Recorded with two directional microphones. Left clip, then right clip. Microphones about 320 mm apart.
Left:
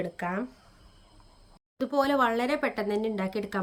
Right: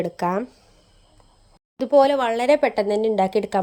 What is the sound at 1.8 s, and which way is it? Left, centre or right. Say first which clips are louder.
A woman's voice: right 9 dB; centre.